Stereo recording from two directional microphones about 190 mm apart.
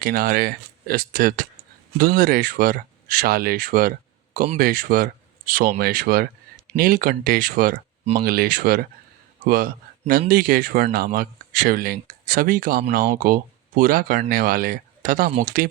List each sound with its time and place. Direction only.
0.0 s speech: 50° right (ahead or behind)